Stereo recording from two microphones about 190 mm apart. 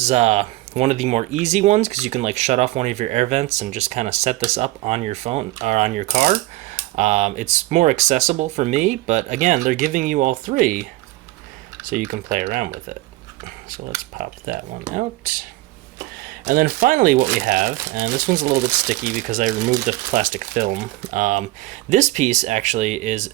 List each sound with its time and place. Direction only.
0.0 s speech: 35° right (ahead or behind)
11.9 s speech: 45° right (ahead or behind)
14.1 s speech: 45° right (ahead or behind)